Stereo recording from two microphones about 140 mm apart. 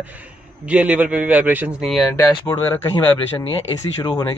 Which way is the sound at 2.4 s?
15° left (ahead or behind).